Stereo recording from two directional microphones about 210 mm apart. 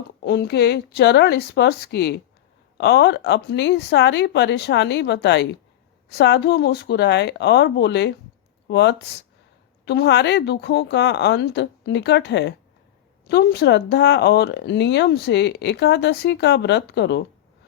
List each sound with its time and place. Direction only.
0.2 s speech: 50° left (ahead or behind)